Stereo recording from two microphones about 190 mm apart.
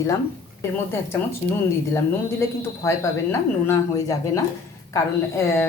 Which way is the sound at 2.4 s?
15° left (ahead or behind).